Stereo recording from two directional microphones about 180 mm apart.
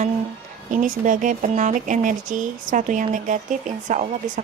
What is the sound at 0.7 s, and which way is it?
Speech, 45° right (ahead or behind).